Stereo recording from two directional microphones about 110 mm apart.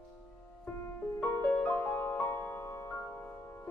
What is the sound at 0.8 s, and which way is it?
Music, 15° left (ahead or behind).